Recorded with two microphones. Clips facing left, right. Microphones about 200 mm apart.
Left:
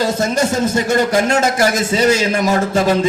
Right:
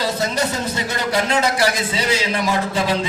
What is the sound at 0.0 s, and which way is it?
A man's voice, 45° left (ahead or behind).